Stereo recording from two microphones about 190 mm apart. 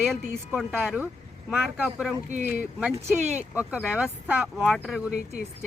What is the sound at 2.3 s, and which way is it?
Speech, 40° right (ahead or behind).